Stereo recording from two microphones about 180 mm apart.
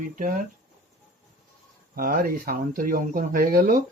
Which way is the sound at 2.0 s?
50° right (ahead or behind).